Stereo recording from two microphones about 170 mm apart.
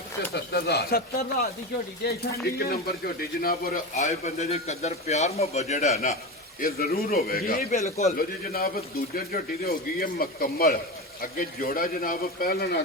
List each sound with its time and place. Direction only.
0.3 s speech: 70° left (ahead or behind)
3.9 s a man's voice: 45° left (ahead or behind)
6.6 s speech: 60° left (ahead or behind)
7.9 s a man's voice: 40° left (ahead or behind)
8.1 s speech: 60° left (ahead or behind)